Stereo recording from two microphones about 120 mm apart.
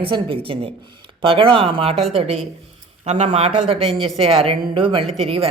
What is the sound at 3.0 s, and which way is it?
A man's voice, 70° right (ahead or behind).